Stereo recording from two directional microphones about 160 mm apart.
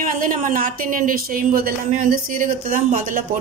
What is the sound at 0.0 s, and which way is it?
A woman's voice, 55° right (ahead or behind).